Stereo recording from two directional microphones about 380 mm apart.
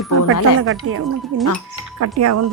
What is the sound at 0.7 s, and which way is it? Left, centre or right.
Speech, right.